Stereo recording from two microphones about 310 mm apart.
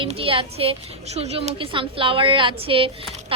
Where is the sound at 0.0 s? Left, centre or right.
Centre.